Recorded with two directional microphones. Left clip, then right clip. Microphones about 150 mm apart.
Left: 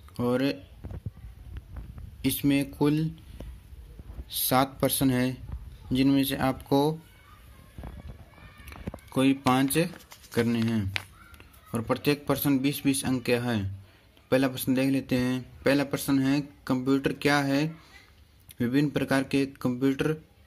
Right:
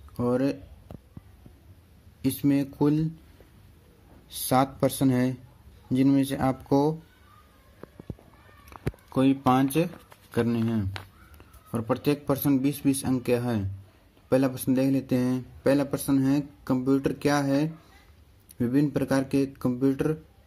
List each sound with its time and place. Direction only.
0.1 s speech: 10° right (ahead or behind)
2.2 s speech: 15° right (ahead or behind)
4.3 s speech: 20° right (ahead or behind)
8.6 s a man's voice: 15° right (ahead or behind)